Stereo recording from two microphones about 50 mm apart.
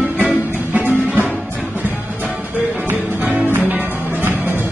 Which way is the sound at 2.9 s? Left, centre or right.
Right.